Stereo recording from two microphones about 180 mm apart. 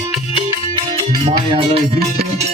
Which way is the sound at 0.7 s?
30° right (ahead or behind).